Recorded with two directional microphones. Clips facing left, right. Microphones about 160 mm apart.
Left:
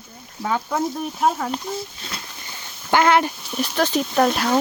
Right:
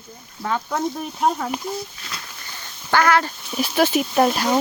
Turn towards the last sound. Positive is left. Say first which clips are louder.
# even
turn(degrees=-5)  # may be behind; listen again after turning